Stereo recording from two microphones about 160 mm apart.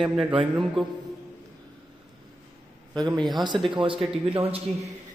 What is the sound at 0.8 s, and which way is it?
Speech, 30° right (ahead or behind).